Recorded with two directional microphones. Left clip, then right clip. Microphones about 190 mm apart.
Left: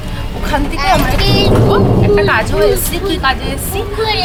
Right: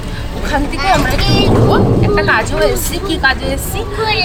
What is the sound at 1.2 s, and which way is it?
Speech, 20° left (ahead or behind).